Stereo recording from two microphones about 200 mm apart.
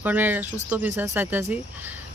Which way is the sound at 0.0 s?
10° right (ahead or behind).